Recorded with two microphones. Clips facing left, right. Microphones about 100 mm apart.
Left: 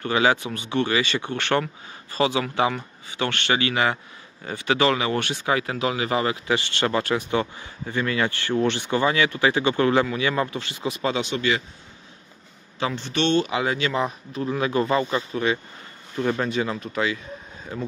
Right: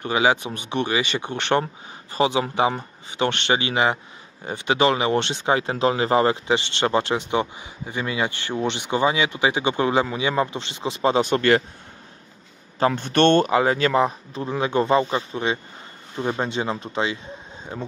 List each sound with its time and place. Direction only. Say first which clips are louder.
0.0 s speech: right 1 dB; 15° right (ahead or behind)
11.1 s a man's voice: right 6 dB; 50° right (ahead or behind)
12.7 s speech: right 6 dB; 45° right (ahead or behind); by 17.9 s 25° right (ahead or behind)